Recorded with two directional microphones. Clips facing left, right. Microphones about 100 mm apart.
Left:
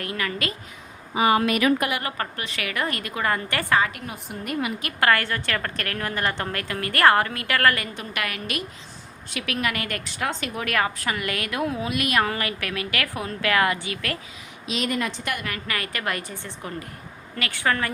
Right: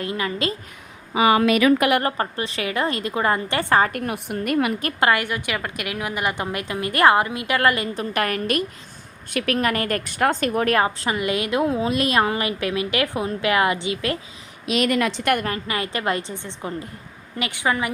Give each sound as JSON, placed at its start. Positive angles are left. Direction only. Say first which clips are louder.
{"t": 0.0, "sound": "a woman's voice", "louder": "right 4 dB", "side_deg": -25}
{"t": 1.1, "sound": "speech", "louder": "right 3 dB", "side_deg": -90}
{"t": 2.1, "sound": "a woman's voice", "louder": "right 5 dB", "side_deg": -30}
{"t": 3.8, "sound": "a woman's voice", "louder": "right 4 dB", "side_deg": -45}
{"t": 4.0, "sound": "a woman's voice", "louder": "right 8 dB", "side_deg": -65}
{"t": 4.9, "sound": "a woman's voice", "louder": "even", "side_deg": -20}
{"t": 7.9, "sound": "a woman's voice", "louder": "right 7 dB", "side_deg": -40}
{"t": 10.7, "sound": "a woman's voice", "louder": "right 5 dB", "side_deg": -30}
{"t": 14.7, "sound": "a woman's voice", "louder": "right 6 dB", "side_deg": -70}
{"t": 15.4, "sound": "a woman's voice", "louder": "right 4 dB", "side_deg": -25}